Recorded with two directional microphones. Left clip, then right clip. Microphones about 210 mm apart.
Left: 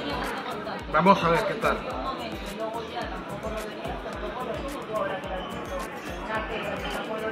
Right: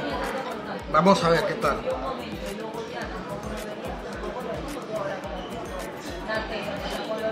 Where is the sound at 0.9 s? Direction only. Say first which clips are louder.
Right 1 dB; 15° right (ahead or behind).